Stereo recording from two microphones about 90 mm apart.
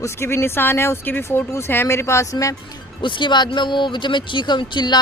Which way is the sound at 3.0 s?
65° left (ahead or behind).